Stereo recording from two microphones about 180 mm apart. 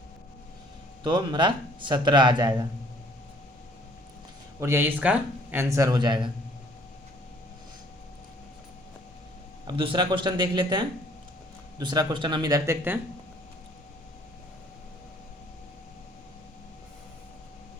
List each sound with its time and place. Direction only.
1.0 s speech: 25° right (ahead or behind)
4.6 s speech: 15° right (ahead or behind)
9.6 s speech: 30° right (ahead or behind)